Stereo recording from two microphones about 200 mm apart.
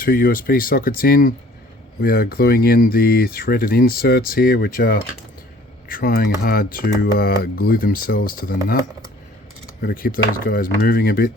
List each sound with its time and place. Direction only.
0.0 s speech: 45° left (ahead or behind)
9.8 s speech: 45° left (ahead or behind)